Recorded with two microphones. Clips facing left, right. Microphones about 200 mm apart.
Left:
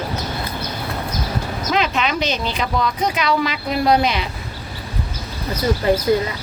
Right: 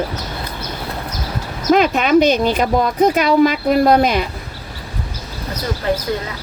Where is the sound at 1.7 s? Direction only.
50° right (ahead or behind).